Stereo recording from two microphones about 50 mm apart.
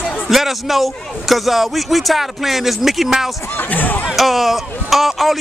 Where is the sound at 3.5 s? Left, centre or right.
Left.